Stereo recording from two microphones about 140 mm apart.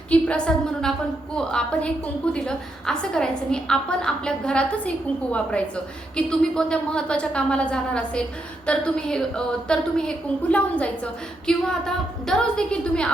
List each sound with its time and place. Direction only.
0.1 s a woman's voice: 10° left (ahead or behind)